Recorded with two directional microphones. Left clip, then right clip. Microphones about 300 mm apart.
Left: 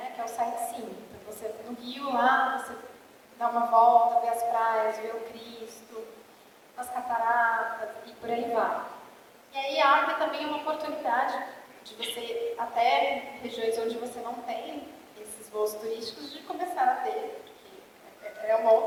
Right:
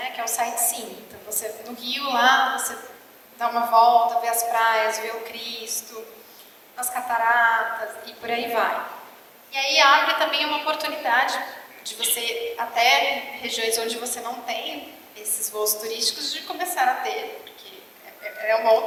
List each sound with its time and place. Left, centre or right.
0.0 s a woman's voice: centre
3.9 s a woman's voice: left; by 14.8 s centre
15.8 s a woman's voice: centre
18.4 s a woman's voice: centre